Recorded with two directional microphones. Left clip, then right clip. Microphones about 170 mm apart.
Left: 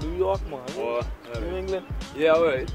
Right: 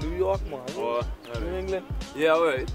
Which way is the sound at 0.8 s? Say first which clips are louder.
Even; 15° right (ahead or behind).